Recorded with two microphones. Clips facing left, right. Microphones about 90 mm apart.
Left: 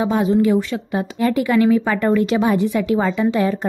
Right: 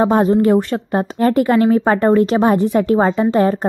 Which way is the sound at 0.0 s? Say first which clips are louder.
Right 4 dB; 45° right (ahead or behind).